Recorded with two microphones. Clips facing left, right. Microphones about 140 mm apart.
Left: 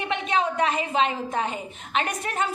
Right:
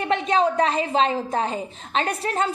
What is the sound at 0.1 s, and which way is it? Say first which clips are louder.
A woman's voice: right 5 dB; 35° right (ahead or behind).